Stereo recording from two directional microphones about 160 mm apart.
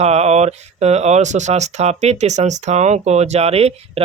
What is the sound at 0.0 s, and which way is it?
Speech, 40° right (ahead or behind).